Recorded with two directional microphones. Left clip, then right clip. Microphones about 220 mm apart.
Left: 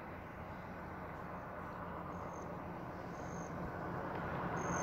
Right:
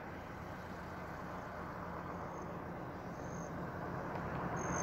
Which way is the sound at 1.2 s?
45° left (ahead or behind).